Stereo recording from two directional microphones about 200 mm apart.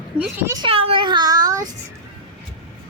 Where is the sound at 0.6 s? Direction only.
30° right (ahead or behind).